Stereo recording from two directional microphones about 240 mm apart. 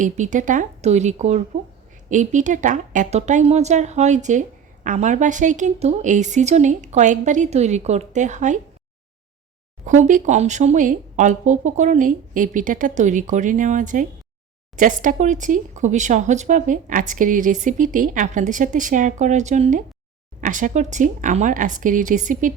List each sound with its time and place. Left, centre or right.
0.0 s a woman's voice: right
9.8 s a woman's voice: right